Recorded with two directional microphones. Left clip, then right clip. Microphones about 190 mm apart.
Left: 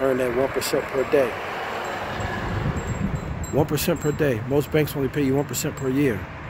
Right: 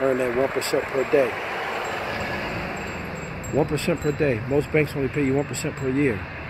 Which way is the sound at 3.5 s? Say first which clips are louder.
Left 1 dB; 15° left (ahead or behind).